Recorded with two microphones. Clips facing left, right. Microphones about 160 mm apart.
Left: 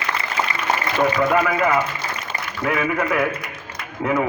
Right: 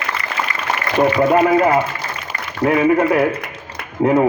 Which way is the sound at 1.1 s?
35° right (ahead or behind).